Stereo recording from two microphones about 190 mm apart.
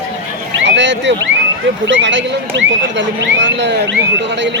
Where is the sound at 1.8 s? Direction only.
75° right (ahead or behind).